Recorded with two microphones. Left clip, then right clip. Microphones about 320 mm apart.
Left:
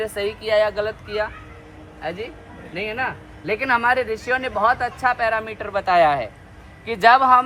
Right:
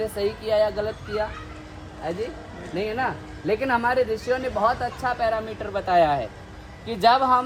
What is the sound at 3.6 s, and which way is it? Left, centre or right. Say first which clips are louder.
Speech: left 4 dB; centre.